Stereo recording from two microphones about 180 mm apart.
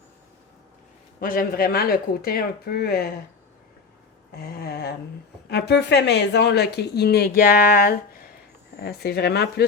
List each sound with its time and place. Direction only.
1.2 s speech: 50° left (ahead or behind)
4.3 s speech: 55° left (ahead or behind)